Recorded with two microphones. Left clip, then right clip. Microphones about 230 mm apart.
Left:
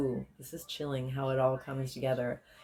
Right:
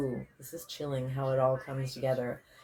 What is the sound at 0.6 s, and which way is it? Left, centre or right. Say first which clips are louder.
Speech: right 1 dB; left.